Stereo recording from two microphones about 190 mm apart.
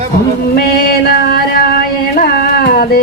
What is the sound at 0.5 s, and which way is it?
Female singing, 50° left (ahead or behind).